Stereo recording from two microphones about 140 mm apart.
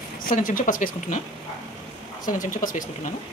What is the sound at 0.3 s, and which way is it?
Speech, 80° left.